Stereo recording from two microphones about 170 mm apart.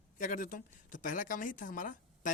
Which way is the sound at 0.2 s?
50° left (ahead or behind).